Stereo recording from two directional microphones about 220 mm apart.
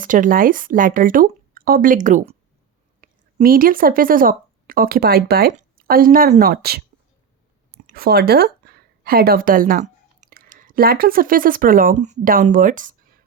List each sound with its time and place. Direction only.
0.0 s a woman's voice: 35° right (ahead or behind)
7.9 s speech: 45° right (ahead or behind)